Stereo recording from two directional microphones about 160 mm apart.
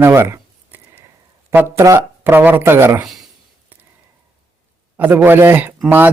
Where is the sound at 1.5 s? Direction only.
15° right (ahead or behind).